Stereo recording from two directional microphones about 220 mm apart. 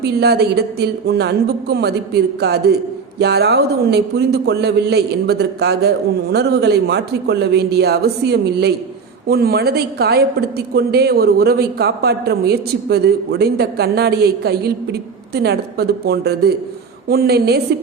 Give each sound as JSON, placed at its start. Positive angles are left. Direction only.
{"t": 0.0, "sound": "speech", "side_deg": -50}